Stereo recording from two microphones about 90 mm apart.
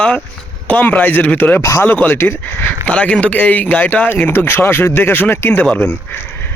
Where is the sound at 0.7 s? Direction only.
20° left (ahead or behind).